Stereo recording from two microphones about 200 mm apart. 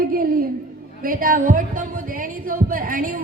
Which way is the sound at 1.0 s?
45° right (ahead or behind).